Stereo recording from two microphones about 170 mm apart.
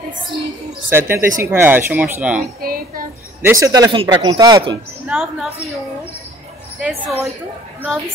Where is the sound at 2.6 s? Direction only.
60° right (ahead or behind).